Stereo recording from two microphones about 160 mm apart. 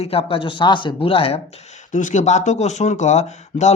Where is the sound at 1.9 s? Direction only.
50° left (ahead or behind).